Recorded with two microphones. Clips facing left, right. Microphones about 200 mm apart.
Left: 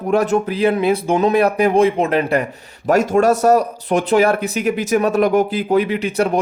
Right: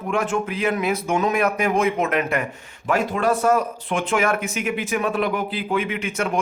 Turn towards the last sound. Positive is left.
turn(degrees=35)  # may be behind; listen again after turning